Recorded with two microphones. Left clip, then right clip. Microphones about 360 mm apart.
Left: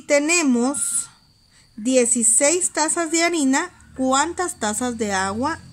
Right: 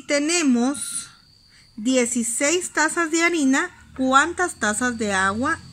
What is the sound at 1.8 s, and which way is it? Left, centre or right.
A woman's voice, centre.